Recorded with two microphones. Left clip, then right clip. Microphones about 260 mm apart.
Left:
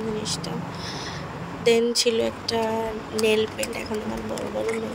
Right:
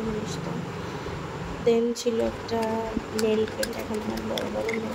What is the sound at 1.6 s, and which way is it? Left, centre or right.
Speech, left.